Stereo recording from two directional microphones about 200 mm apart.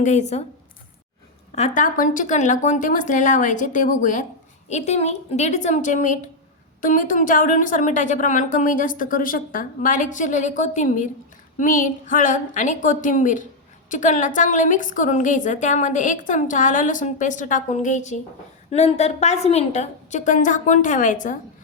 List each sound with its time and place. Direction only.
0.0 s a woman's voice: 35° left (ahead or behind)
1.5 s a woman's voice: 35° left (ahead or behind)